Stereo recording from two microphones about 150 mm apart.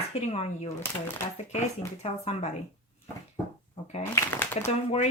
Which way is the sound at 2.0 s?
45° left (ahead or behind).